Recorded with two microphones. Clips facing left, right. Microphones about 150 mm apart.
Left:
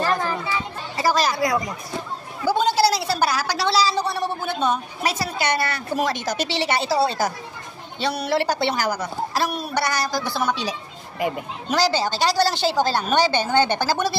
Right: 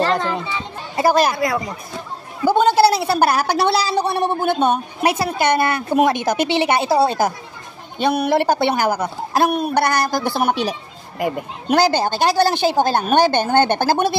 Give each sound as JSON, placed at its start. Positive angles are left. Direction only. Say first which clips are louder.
{"t": 0.0, "sound": "children playing", "louder": "right 4 dB", "side_deg": -70}
{"t": 0.9, "sound": "a woman's voice", "louder": "right 5 dB", "side_deg": -55}
{"t": 10.6, "sound": "a sound", "louder": "right 5 dB", "side_deg": -55}
{"t": 11.7, "sound": "a woman's voice", "louder": "right 5 dB", "side_deg": -55}